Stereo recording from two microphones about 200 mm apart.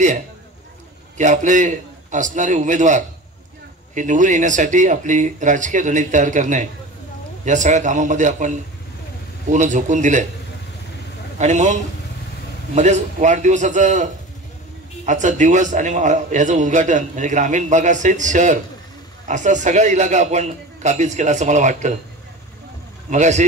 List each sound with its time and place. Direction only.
1.1 s a man's voice: 40° right (ahead or behind)
11.3 s a man's voice: 35° right (ahead or behind)
23.0 s speech: 35° right (ahead or behind)